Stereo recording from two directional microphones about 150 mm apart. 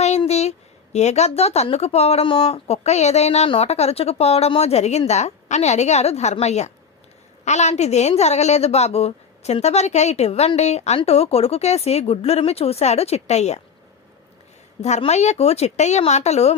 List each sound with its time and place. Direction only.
0.3 s a sound: 45° left (ahead or behind)
0.9 s a woman's voice: 50° left (ahead or behind)
14.8 s a woman's voice: 50° left (ahead or behind)